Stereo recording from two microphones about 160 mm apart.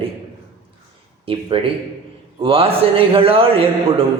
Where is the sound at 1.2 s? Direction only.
35° right (ahead or behind).